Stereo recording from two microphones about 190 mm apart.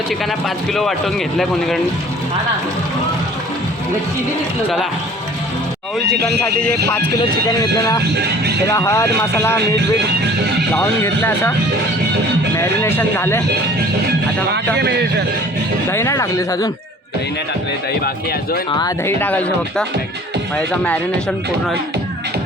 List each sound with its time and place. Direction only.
0.3 s speech: centre (ahead or behind)
6.1 s speech: 60° right (ahead or behind)
7.2 s speech: 20° left (ahead or behind)
8.1 s speech: 60° right (ahead or behind)
8.6 s speech: 15° left (ahead or behind)
10.8 s speech: 15° left (ahead or behind)
12.5 s speech: 15° left (ahead or behind)
14.8 s speech: 60° right (ahead or behind)
15.9 s speech: 15° left (ahead or behind)
18.7 s speech: 20° left (ahead or behind)
19.2 s speech: 10° left (ahead or behind)